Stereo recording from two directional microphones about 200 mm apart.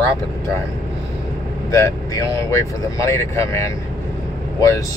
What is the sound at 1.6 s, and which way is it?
Speech, 15° left (ahead or behind).